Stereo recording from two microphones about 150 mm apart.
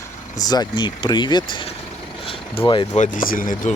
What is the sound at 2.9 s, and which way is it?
Speech, 60° left (ahead or behind).